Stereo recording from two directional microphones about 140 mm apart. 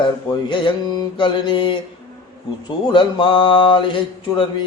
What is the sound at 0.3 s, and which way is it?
Mantra, 35° left (ahead or behind).